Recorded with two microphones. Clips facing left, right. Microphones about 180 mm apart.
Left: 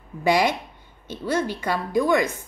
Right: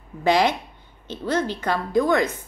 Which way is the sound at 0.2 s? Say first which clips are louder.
Right 1 dB; 10° left (ahead or behind).